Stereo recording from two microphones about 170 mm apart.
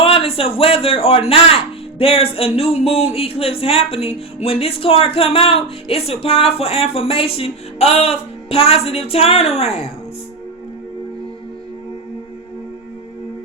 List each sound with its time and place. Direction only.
0.0 s speech: 35° left (ahead or behind)